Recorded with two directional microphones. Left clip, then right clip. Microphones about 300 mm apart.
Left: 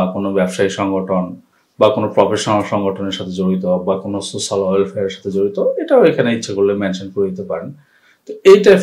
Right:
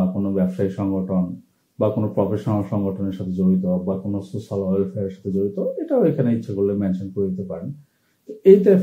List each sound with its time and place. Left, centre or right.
0.2 s speech: centre